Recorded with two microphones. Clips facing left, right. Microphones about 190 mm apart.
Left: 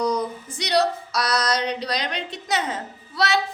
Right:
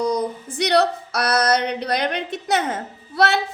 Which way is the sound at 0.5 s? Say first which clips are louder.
Right 3 dB; 60° right (ahead or behind).